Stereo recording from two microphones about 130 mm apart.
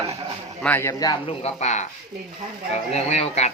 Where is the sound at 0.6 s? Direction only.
15° left (ahead or behind).